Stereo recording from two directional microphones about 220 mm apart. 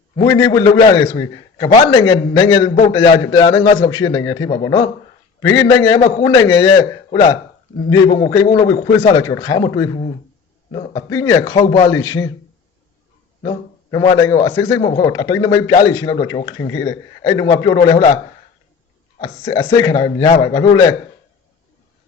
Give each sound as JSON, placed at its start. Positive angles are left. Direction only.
{"t": 0.2, "sound": "a man's voice", "side_deg": 15}
{"t": 13.4, "sound": "a man's voice", "side_deg": 20}
{"t": 19.2, "sound": "a man's voice", "side_deg": 15}